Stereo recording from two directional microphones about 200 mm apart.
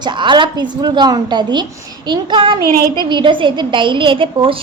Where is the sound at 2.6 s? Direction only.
50° right (ahead or behind).